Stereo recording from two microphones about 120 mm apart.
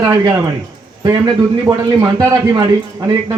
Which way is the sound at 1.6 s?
25° right (ahead or behind).